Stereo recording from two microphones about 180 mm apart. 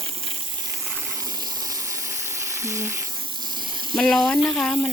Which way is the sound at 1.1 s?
20° right (ahead or behind).